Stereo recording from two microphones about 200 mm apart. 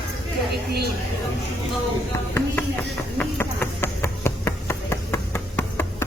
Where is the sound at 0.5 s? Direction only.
55° right (ahead or behind).